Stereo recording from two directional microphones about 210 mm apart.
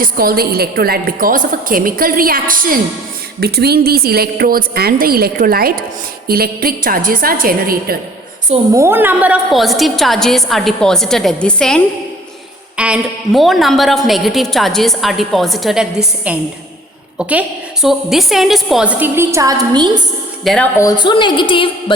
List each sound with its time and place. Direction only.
0.0 s a woman's voice: 45° right (ahead or behind)
8.7 s a woman's voice: 10° right (ahead or behind)
20.4 s a woman's voice: centre (ahead or behind)
20.7 s a woman's voice: 20° left (ahead or behind)